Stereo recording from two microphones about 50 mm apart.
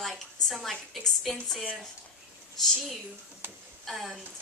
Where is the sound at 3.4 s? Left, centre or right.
Right.